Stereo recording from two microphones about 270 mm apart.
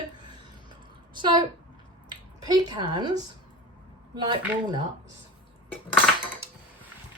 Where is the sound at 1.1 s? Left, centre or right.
Centre.